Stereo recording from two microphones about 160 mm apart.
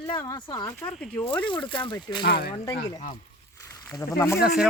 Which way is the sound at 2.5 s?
25° left (ahead or behind).